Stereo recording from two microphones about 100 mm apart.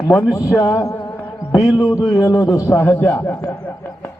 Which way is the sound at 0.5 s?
35° left (ahead or behind).